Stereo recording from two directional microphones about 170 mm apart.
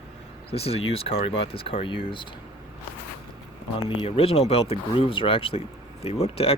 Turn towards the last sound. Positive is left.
turn(degrees=35)  # may be behind; listen again after turning